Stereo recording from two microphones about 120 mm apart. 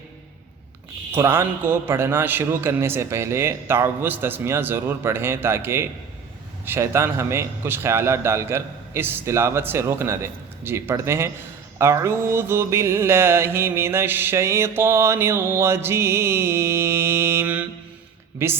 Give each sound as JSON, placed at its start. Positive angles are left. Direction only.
{"t": 1.1, "sound": "mantra", "side_deg": -20}